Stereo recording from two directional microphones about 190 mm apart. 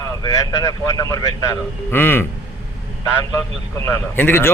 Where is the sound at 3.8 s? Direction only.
15° left (ahead or behind).